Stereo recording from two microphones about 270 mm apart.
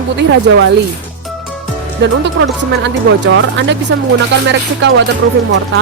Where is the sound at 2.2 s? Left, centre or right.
Right.